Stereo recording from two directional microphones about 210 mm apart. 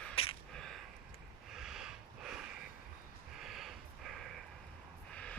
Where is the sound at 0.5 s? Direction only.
Centre (ahead or behind).